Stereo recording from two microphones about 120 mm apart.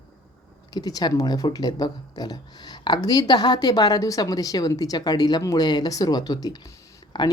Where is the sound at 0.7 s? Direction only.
30° left (ahead or behind).